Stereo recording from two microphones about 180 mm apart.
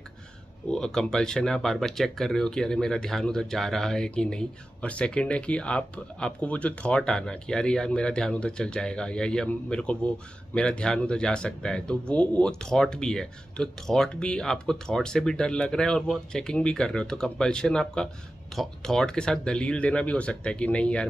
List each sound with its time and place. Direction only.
0.7 s speech: 5° left (ahead or behind)